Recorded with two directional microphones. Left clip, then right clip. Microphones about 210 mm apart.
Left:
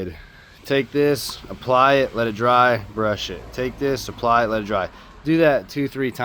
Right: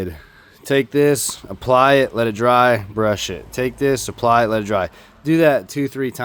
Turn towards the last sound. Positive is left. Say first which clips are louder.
# right 2 dB
turn(degrees=-40)  # may be behind; listen again after turning